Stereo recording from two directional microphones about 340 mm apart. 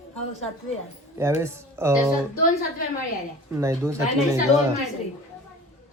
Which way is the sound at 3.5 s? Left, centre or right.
Centre.